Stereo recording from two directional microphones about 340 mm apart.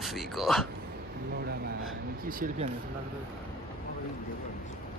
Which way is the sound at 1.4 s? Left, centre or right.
Right.